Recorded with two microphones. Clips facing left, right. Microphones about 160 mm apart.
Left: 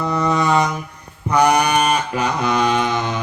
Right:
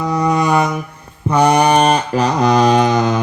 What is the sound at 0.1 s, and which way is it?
Mantra, 15° right (ahead or behind).